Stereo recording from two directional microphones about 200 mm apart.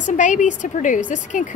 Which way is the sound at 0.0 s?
40° left (ahead or behind).